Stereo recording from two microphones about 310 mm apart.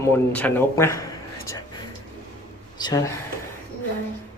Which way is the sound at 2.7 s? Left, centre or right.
Centre.